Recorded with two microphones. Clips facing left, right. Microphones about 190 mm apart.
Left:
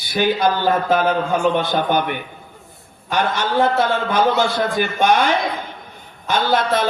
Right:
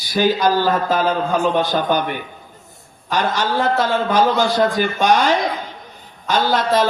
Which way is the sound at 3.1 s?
55° left (ahead or behind).